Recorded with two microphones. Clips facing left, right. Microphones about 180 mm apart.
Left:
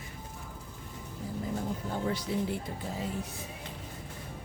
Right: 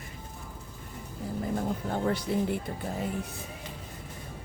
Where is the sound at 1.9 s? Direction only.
55° right (ahead or behind).